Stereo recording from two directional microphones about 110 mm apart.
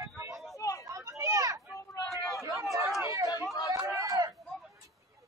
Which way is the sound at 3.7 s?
25° right (ahead or behind).